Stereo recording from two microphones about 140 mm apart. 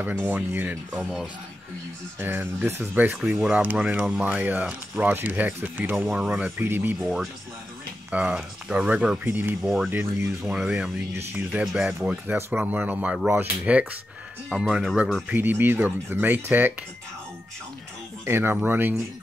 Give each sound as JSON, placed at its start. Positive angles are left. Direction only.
{"t": 0.0, "sound": "speech", "side_deg": -10}
{"t": 7.0, "sound": "speech", "side_deg": 0}
{"t": 9.6, "sound": "speech", "side_deg": 0}
{"t": 9.8, "sound": "speech", "side_deg": -15}
{"t": 10.4, "sound": "speech", "side_deg": -5}
{"t": 12.4, "sound": "speech", "side_deg": -15}
{"t": 18.2, "sound": "speech", "side_deg": -15}